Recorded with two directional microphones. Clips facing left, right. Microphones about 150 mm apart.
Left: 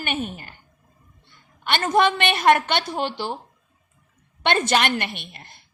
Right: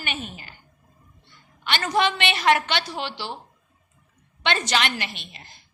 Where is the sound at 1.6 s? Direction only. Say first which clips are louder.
Left 4 dB; 50° left (ahead or behind).